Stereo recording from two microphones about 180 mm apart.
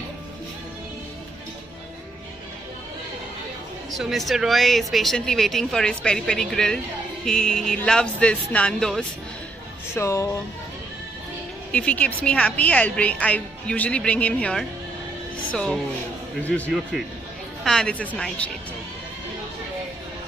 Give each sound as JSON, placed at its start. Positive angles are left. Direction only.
{"t": 3.9, "sound": "speech", "side_deg": 0}
{"t": 9.9, "sound": "a woman's voice", "side_deg": 15}
{"t": 11.7, "sound": "a woman's voice", "side_deg": 5}